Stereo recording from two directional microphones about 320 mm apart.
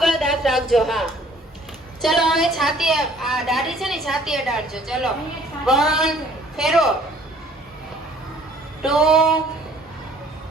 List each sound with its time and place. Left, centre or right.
0.0 s a sound: centre
2.0 s a woman's voice: centre
8.8 s a woman's voice: centre